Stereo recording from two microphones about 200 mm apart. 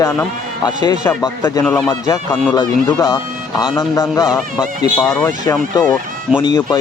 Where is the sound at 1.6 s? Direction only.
5° left (ahead or behind).